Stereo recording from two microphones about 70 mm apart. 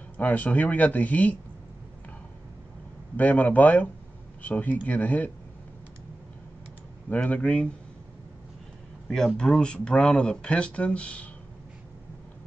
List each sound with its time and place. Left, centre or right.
0.2 s speech: left
3.2 s speech: left
7.1 s speech: left
9.4 s speech: centre